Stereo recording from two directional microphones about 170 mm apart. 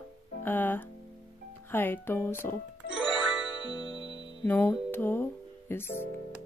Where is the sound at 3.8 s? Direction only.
30° left (ahead or behind).